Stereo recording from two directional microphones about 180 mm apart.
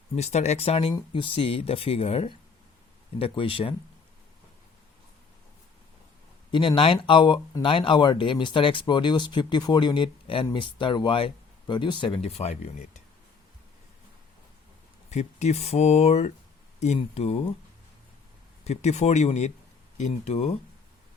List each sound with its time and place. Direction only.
0.2 s speech: 40° left (ahead or behind)
6.5 s speech: 30° left (ahead or behind)
15.1 s speech: 40° left (ahead or behind)
18.6 s speech: 35° left (ahead or behind)